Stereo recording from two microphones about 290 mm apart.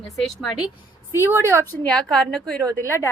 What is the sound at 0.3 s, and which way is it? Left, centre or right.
Speech, centre.